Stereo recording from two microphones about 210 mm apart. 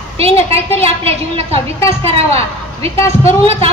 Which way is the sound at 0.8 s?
30° right (ahead or behind).